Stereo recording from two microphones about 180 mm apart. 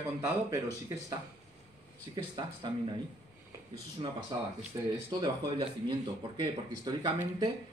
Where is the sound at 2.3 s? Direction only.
25° right (ahead or behind).